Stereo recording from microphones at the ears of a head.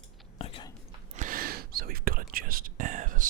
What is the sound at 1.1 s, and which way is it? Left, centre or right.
Whispering, right.